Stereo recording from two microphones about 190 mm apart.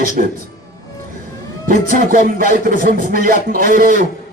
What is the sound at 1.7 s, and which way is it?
Speech, 45° right (ahead or behind).